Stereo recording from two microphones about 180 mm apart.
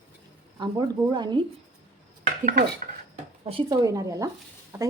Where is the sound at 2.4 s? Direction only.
45° right (ahead or behind).